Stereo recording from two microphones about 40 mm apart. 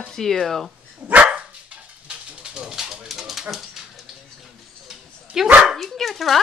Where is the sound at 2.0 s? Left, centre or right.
Right; by 3.4 s centre.